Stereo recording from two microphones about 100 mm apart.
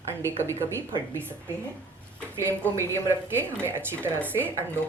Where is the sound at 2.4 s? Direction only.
25° right (ahead or behind).